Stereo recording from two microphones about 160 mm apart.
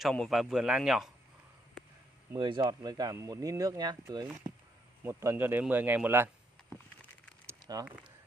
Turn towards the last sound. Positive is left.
turn(degrees=-20)  # may be behind; listen again after turning